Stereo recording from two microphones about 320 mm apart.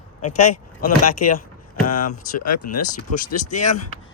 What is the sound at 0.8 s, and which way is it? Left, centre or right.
Speech, left.